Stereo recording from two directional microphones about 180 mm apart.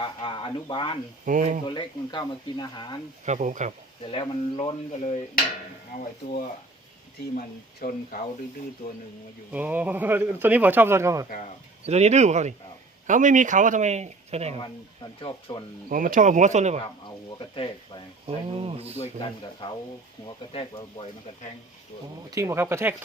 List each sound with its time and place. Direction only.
0.0 s speech: 30° left (ahead or behind)
1.2 s speech: 45° right (ahead or behind)
1.6 s speech: 25° left (ahead or behind)
3.2 s speech: 40° right (ahead or behind)
4.0 s speech: 30° left (ahead or behind)
7.3 s speech: 50° left (ahead or behind)
9.5 s a man's voice: 10° right (ahead or behind)
11.9 s speech: 40° right (ahead or behind)
15.2 s speech: 30° left (ahead or behind)
15.9 s speech: 50° right (ahead or behind)
17.5 s speech: 30° left (ahead or behind)
18.3 s speech: 30° right (ahead or behind)
19.2 s speech: 25° left (ahead or behind)
22.3 s a man's voice: 15° right (ahead or behind)